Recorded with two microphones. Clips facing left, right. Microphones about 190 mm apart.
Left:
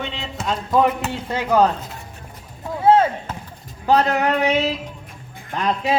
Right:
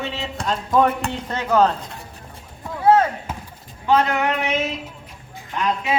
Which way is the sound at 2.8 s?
25° left (ahead or behind).